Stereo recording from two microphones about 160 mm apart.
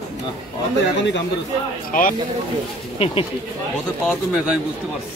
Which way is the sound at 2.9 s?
35° left (ahead or behind).